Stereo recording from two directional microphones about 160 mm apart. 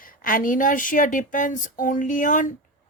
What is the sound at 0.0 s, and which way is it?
Speech, 60° left (ahead or behind).